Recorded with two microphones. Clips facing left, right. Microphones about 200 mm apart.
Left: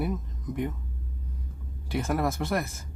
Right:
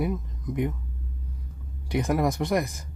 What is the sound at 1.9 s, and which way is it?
Speech, 15° right (ahead or behind).